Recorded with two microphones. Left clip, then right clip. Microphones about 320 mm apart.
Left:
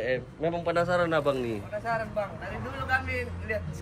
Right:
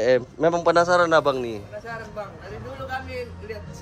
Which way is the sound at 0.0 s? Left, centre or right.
Right.